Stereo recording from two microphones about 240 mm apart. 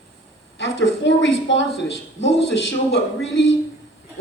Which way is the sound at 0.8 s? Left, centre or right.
Left.